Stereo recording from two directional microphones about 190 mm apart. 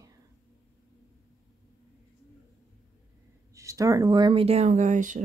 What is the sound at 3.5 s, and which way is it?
Speech, 15° right (ahead or behind).